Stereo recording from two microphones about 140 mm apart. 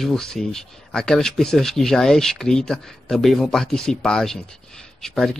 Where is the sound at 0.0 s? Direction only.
5° left (ahead or behind).